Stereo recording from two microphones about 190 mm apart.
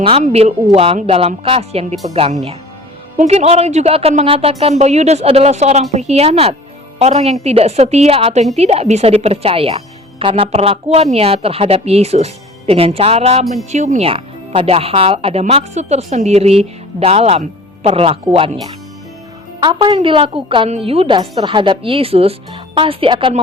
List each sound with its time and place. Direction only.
0.0 s a woman's voice: 30° right (ahead or behind)